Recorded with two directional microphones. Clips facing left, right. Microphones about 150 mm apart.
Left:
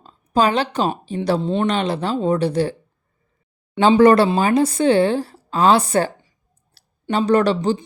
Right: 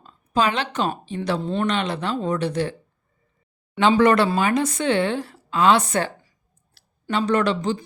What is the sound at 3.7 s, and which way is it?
A woman's voice, 30° left (ahead or behind).